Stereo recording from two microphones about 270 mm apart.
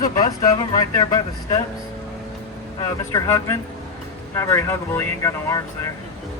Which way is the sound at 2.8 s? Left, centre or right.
Centre.